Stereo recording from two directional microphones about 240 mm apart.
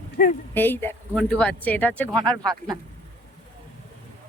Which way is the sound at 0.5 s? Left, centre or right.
Centre.